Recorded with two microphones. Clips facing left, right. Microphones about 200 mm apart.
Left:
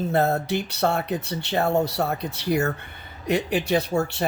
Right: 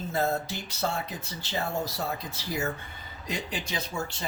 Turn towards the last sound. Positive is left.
turn(degrees=65)  # may be behind; listen again after turning